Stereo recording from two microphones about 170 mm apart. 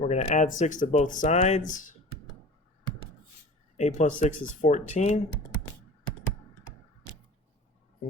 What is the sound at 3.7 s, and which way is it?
Speech, 45° left (ahead or behind).